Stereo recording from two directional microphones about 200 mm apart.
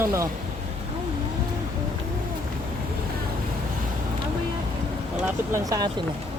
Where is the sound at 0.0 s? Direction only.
15° right (ahead or behind).